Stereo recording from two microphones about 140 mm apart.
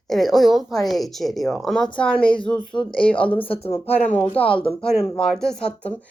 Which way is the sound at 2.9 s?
10° left (ahead or behind).